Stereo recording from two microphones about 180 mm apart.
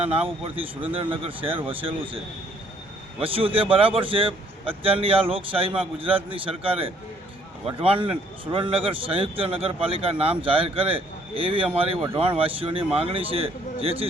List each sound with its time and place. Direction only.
0.0 s speech: 30° right (ahead or behind)
3.2 s speech: 30° right (ahead or behind)